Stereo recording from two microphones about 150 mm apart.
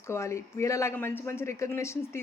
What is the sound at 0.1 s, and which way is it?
A woman's voice, 20° left (ahead or behind).